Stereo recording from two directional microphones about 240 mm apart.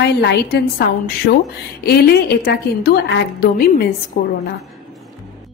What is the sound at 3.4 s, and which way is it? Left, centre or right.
Speech, left.